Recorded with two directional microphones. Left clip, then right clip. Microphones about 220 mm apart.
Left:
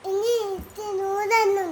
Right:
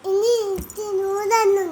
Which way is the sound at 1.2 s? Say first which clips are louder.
Right 3 dB; 10° left (ahead or behind).